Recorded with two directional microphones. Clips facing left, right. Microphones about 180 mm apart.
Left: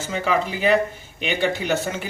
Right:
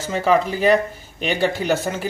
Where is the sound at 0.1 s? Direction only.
40° right (ahead or behind).